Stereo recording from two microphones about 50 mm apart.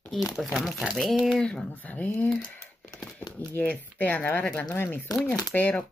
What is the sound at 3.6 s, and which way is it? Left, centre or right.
Speech, left.